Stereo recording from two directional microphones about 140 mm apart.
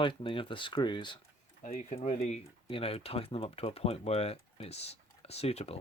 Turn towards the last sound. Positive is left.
turn(degrees=45)  # may be behind; listen again after turning